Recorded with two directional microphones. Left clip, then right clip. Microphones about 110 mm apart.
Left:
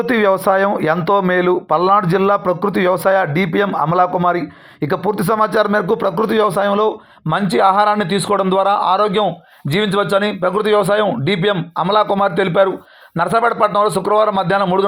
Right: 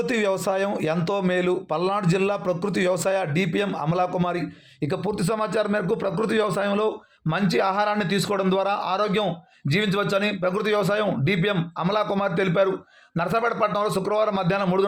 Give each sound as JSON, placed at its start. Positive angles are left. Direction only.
{"t": 0.0, "sound": "speech", "side_deg": 35}